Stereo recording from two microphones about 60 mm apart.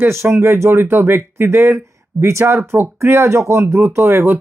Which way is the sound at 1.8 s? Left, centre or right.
Right.